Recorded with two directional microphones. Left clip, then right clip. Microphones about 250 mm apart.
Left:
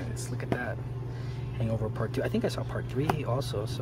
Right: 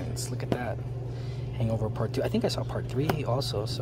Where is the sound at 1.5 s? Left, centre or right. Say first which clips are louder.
Right 2 dB; centre.